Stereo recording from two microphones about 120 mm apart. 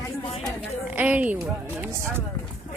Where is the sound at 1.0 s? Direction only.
15° right (ahead or behind).